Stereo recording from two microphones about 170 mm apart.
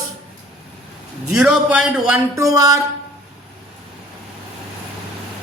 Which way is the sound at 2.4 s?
20° right (ahead or behind).